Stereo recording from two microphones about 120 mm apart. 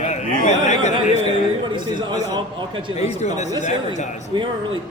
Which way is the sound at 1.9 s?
40° right (ahead or behind).